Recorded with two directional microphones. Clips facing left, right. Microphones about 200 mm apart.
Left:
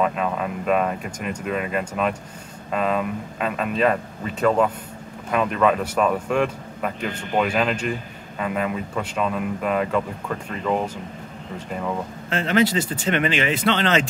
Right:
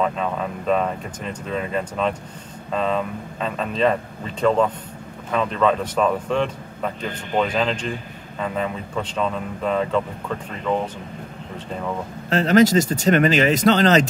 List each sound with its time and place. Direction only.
0.0 s a man's voice: 5° left (ahead or behind)
12.3 s speech: 40° right (ahead or behind)